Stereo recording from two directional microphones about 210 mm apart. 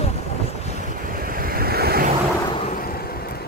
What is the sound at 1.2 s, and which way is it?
Waves, 45° right (ahead or behind).